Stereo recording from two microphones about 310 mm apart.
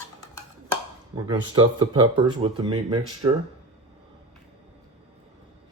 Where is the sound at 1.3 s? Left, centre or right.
Centre.